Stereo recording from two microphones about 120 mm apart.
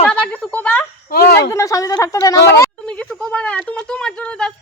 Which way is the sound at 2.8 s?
10° left (ahead or behind).